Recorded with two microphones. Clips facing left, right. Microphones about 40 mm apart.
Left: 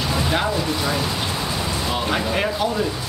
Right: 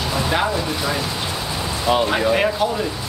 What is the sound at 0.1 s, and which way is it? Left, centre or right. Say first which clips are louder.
Speech: right 2 dB; centre.